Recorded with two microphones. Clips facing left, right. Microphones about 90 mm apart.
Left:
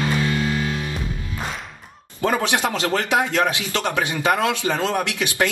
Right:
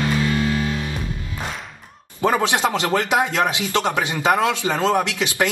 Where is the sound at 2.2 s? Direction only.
20° right (ahead or behind).